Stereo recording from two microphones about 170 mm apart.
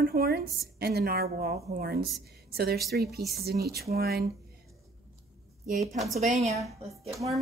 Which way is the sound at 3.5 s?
70° right (ahead or behind).